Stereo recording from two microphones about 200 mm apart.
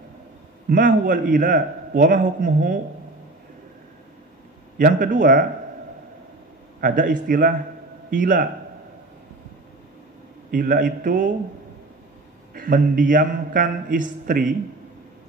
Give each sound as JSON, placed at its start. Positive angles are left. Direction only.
{"t": 0.7, "sound": "a man's voice", "side_deg": -45}
{"t": 4.7, "sound": "a man's voice", "side_deg": -45}
{"t": 6.8, "sound": "a man's voice", "side_deg": -45}
{"t": 10.5, "sound": "a man's voice", "side_deg": -45}
{"t": 12.5, "sound": "a man's voice", "side_deg": -45}